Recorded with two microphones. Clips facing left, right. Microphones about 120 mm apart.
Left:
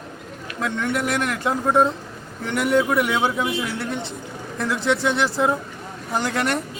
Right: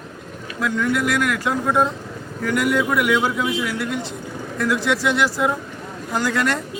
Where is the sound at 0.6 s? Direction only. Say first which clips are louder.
Right 3 dB; 25° left (ahead or behind).